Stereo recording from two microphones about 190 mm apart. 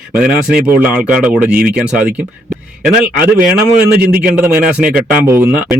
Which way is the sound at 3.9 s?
55° right (ahead or behind).